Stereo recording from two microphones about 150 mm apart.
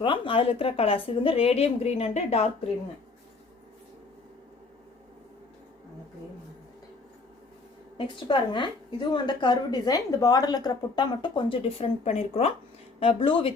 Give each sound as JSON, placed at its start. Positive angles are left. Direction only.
{"t": 0.0, "sound": "a woman's voice", "side_deg": 35}
{"t": 7.9, "sound": "a woman's voice", "side_deg": 30}